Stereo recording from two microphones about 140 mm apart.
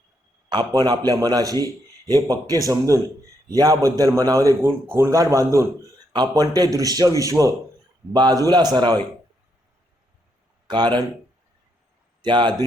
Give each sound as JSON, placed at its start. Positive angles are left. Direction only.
{"t": 0.5, "sound": "a man's voice", "side_deg": -30}
{"t": 10.7, "sound": "a man's voice", "side_deg": -30}
{"t": 12.2, "sound": "a man's voice", "side_deg": -35}